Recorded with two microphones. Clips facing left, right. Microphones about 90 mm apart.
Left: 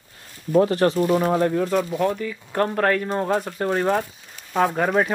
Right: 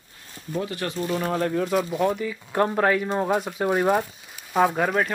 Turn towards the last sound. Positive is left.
turn(degrees=0)  # may be behind; listen again after turning